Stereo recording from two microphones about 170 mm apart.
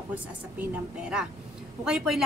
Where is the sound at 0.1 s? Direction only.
5° right (ahead or behind).